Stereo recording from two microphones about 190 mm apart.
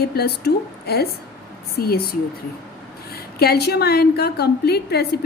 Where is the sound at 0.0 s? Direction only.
55° left (ahead or behind).